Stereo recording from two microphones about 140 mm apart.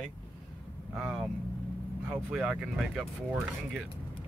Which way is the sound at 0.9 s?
5° right (ahead or behind).